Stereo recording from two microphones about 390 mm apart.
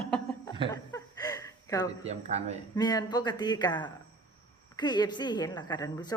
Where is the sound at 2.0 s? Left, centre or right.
Centre.